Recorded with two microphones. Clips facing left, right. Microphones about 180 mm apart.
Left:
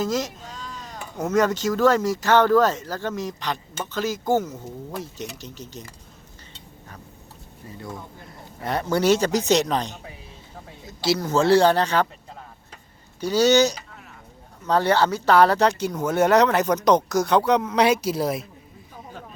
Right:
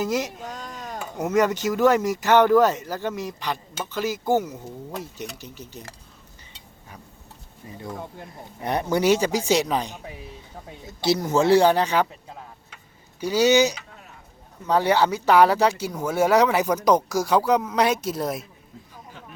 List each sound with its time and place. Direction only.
0.0 s speech: 10° right (ahead or behind)
0.3 s a sound: 45° right (ahead or behind)
1.2 s speech: 15° right (ahead or behind)
8.6 s speech: 15° right (ahead or behind)
10.8 s speech: 20° right (ahead or behind)
13.1 s speech: 10° right (ahead or behind)